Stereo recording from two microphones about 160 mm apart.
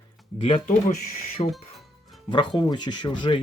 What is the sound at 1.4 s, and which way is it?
Speech, 35° left (ahead or behind).